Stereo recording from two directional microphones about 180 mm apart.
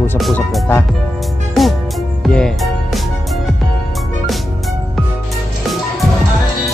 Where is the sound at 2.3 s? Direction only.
5° left (ahead or behind).